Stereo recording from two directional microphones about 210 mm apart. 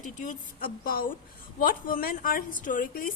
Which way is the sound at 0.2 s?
40° left (ahead or behind).